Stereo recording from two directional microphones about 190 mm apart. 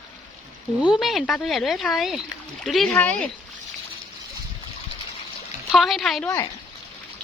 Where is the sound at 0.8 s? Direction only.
Centre (ahead or behind).